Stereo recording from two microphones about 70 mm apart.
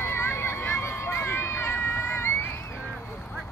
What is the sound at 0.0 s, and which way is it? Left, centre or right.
Run, left.